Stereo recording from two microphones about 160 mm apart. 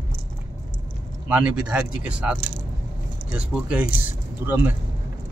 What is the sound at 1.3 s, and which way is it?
Speech, 10° right (ahead or behind).